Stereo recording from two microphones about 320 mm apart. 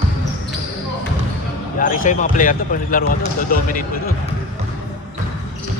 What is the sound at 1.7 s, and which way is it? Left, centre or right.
Speech, left.